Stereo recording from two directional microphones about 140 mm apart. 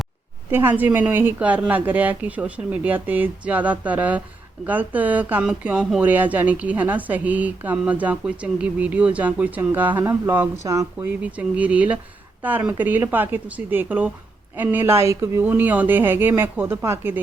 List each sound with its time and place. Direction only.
0.5 s speech: 15° right (ahead or behind)
11.2 s speech: 10° right (ahead or behind)